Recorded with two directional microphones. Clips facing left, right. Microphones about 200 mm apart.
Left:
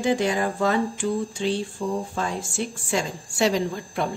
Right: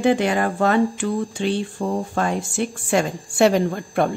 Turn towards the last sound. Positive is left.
turn(degrees=-55)  # may be behind; listen again after turning